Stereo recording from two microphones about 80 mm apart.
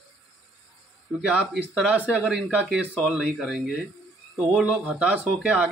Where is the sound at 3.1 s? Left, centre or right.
Centre.